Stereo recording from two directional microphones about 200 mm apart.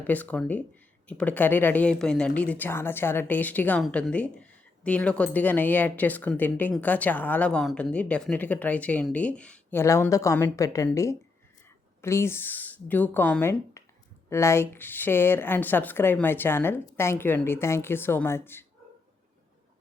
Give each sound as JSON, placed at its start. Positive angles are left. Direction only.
{"t": 0.0, "sound": "speech", "side_deg": 10}